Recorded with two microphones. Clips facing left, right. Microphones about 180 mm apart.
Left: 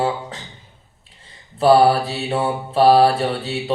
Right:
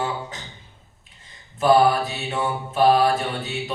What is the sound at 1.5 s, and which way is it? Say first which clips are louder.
Mantra: left 4 dB; 30° left (ahead or behind).